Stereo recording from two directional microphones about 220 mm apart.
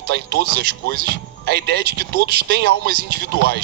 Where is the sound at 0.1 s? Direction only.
45° right (ahead or behind).